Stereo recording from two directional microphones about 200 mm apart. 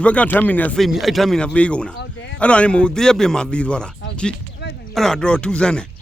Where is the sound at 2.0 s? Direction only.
60° left (ahead or behind).